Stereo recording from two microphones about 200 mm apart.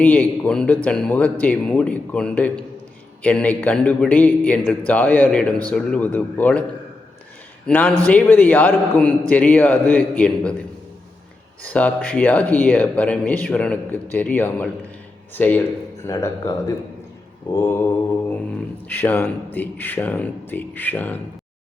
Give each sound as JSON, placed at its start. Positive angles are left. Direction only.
{"t": 0.0, "sound": "a man's voice", "side_deg": 5}
{"t": 7.7, "sound": "speech", "side_deg": 10}
{"t": 11.6, "sound": "speech", "side_deg": 5}
{"t": 18.9, "sound": "speech", "side_deg": 10}